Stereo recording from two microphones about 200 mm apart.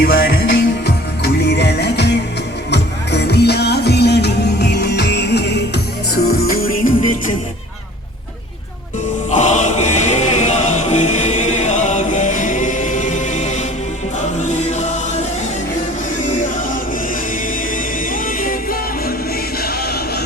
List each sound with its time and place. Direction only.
0.2 s music: 55° left (ahead or behind)
9.3 s music: 35° left (ahead or behind)
18.1 s music: 45° left (ahead or behind)
19.6 s choir: 50° left (ahead or behind)